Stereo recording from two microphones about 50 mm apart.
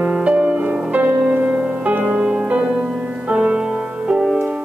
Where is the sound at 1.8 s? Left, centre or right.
Right.